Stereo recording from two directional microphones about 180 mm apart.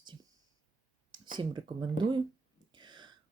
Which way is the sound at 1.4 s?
25° right (ahead or behind).